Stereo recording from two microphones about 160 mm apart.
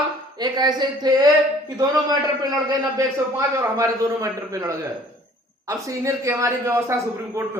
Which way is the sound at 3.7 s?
20° right (ahead or behind).